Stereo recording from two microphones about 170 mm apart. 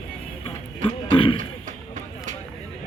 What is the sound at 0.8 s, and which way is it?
Speech, 30° left (ahead or behind).